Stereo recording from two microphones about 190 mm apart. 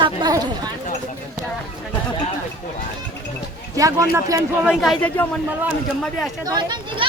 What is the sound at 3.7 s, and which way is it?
Speech, 15° right (ahead or behind).